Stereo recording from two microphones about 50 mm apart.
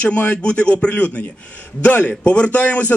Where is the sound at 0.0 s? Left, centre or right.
Left.